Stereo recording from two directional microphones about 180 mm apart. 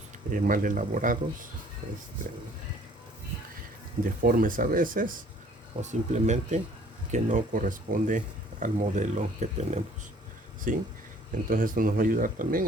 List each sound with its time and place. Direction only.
0.3 s speech: 50° right (ahead or behind)
4.2 s speech: 50° right (ahead or behind)